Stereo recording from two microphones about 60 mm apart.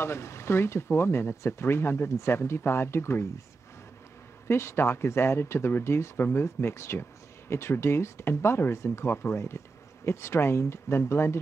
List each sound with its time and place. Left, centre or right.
0.0 s speech: left
4.5 s speech: left